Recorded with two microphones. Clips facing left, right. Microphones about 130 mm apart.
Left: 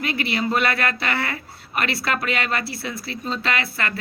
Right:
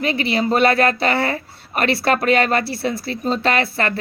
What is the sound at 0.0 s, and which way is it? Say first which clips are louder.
A woman's voice: right 5 dB; 25° right (ahead or behind).